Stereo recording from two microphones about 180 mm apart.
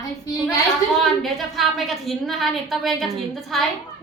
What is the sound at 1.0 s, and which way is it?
A woman's voice, centre (ahead or behind).